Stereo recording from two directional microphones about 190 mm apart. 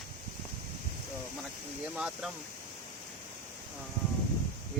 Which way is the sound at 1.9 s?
5° right (ahead or behind).